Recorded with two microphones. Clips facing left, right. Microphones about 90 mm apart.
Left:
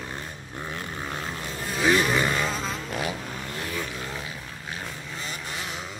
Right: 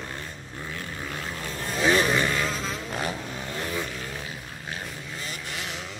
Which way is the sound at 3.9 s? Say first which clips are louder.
Left 1 dB; 35° left (ahead or behind).